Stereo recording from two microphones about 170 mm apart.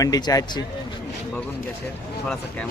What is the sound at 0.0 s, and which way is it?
Speech, 20° left (ahead or behind).